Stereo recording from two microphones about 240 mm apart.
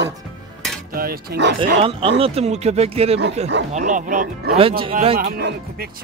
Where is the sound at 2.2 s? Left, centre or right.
Right.